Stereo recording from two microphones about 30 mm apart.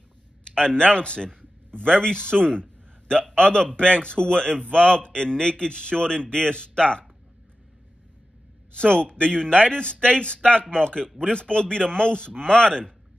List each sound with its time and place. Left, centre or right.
0.6 s a man's voice: left
8.7 s a man's voice: left